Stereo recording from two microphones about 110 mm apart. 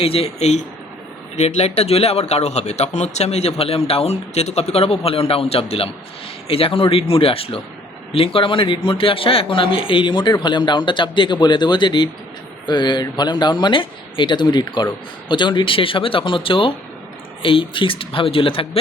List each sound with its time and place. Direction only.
0.0 s speech: 60° left (ahead or behind)